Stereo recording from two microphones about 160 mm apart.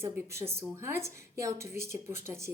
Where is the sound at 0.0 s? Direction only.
15° right (ahead or behind).